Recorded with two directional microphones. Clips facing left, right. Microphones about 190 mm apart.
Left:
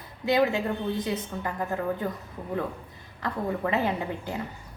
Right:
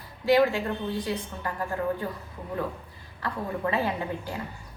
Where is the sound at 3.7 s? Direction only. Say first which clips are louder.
Left 1 dB; 20° left (ahead or behind).